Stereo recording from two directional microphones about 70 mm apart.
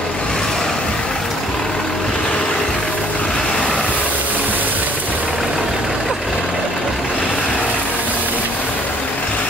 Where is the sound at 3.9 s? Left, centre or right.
Left.